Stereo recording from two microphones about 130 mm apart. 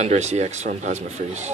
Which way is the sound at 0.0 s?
60° right (ahead or behind).